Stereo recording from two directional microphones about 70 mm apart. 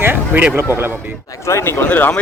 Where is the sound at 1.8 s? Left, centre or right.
Left.